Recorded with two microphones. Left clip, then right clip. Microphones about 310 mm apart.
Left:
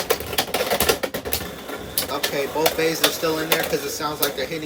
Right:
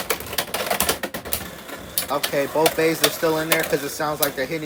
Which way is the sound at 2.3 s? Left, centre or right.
Centre.